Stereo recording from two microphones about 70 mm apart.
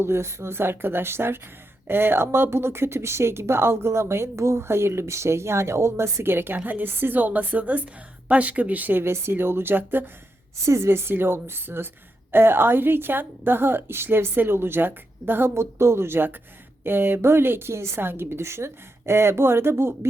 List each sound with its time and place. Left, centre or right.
0.0 s speech: right
10.7 s speech: right